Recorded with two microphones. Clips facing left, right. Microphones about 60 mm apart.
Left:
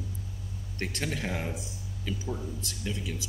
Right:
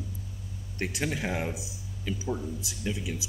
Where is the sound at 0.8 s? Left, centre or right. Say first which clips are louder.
Right 2 dB; centre.